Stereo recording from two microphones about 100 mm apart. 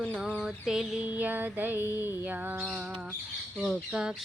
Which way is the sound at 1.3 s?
20° right (ahead or behind).